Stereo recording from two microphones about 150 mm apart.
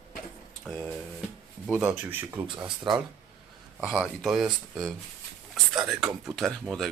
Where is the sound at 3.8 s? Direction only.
5° right (ahead or behind).